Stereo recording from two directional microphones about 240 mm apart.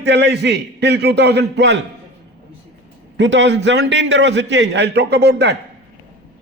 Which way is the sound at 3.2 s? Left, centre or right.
Right.